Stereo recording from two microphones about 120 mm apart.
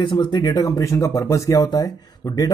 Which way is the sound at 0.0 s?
40° left (ahead or behind).